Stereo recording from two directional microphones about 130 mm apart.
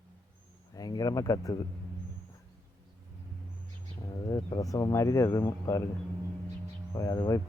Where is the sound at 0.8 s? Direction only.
30° left (ahead or behind).